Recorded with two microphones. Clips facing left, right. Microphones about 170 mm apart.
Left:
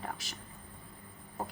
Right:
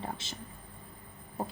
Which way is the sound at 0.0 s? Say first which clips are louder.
Right 2 dB; 25° right (ahead or behind).